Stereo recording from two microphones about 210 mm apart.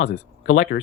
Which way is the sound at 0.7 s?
50° left (ahead or behind).